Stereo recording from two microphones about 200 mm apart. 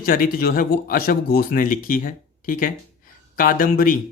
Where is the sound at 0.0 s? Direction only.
45° left (ahead or behind).